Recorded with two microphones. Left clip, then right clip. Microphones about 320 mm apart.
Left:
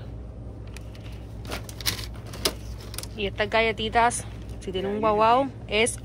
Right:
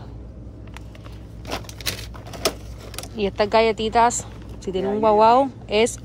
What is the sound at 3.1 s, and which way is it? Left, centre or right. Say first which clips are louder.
A woman's voice: right 6 dB; centre.